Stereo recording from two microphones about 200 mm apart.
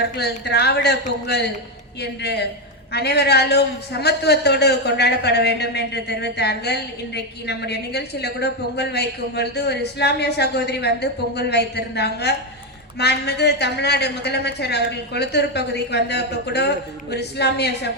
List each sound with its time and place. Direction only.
0.2 s a woman's voice: 55° left (ahead or behind)
2.0 s a woman's voice: 55° left (ahead or behind)